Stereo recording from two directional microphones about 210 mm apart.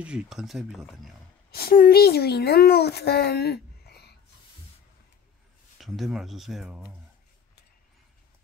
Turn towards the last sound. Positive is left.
turn(degrees=-5)  # may be behind; listen again after turning